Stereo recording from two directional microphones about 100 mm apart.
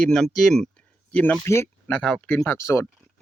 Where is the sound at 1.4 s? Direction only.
25° left (ahead or behind).